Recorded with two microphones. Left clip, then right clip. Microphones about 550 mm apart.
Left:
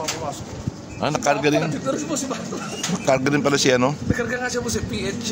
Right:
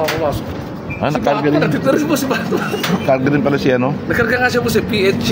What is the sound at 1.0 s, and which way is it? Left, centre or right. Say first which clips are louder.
Speech: right 4 dB; left.